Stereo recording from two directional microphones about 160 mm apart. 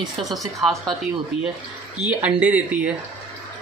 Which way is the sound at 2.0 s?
5° right (ahead or behind).